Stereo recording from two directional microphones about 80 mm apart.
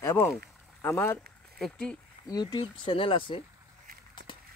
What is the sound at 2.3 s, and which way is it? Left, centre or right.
Speech, left.